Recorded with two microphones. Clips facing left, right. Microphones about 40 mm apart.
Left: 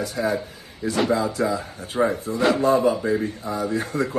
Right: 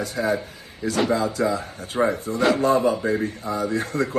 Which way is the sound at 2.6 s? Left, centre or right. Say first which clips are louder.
Left 1 dB; right.